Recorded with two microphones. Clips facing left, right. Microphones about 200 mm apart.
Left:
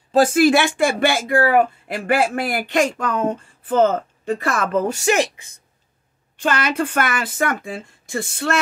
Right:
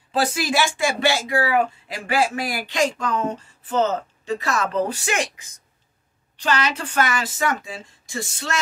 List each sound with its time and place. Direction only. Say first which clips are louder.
0.1 s speech: left 8 dB; 50° left (ahead or behind)
5.0 s speech: left 7 dB; 35° left (ahead or behind)
6.3 s speech: left 3 dB; 50° left (ahead or behind)